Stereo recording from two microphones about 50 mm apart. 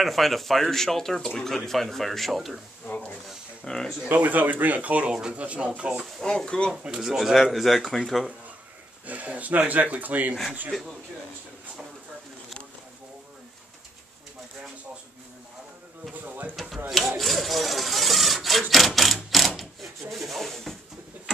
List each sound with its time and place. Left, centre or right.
0.0 s speech: centre
2.9 s a sound: left
3.6 s speech: centre
4.1 s speech: right
5.1 s speech: centre
6.2 s speech: centre
7.0 s speech: centre
9.0 s speech: right
16.1 s speech: right
16.5 s speech: centre
19.3 s a sound: centre
20.1 s speech: centre